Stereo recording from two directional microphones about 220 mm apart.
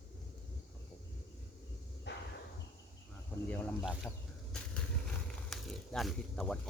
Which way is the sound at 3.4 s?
5° left (ahead or behind).